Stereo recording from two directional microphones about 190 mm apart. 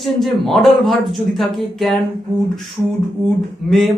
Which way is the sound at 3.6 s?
Centre (ahead or behind).